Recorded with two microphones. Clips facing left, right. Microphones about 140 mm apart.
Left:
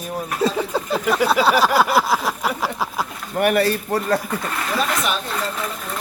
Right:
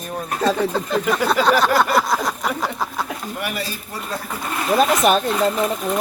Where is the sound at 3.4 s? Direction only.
60° left (ahead or behind).